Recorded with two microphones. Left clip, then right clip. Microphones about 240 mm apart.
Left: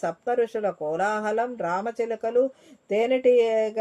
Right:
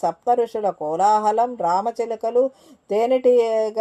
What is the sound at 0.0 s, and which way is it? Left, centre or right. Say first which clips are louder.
Speech: right 5 dB; right.